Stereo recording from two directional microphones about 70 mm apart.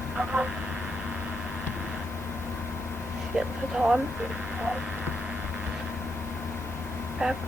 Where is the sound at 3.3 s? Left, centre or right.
Centre.